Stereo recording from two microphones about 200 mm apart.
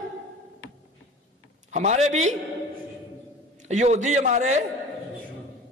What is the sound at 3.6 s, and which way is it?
A man's voice, 35° right (ahead or behind).